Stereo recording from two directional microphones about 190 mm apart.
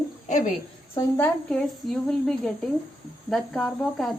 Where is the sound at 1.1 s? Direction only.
5° left (ahead or behind).